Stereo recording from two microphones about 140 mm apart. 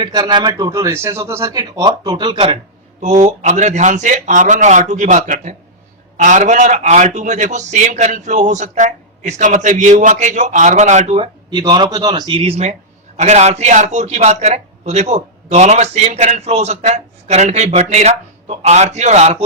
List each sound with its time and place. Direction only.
0.0 s speech: 30° right (ahead or behind)
3.0 s a man's voice: 55° right (ahead or behind)
11.5 s a man's voice: 30° right (ahead or behind); by 19.4 s 50° right (ahead or behind)